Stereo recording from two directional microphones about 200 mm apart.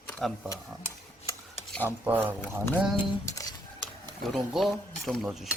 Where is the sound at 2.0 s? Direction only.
10° right (ahead or behind).